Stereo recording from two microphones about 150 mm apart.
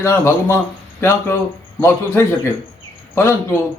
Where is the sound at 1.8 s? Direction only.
15° left (ahead or behind).